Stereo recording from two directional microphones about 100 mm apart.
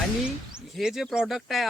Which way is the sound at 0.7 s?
Centre (ahead or behind).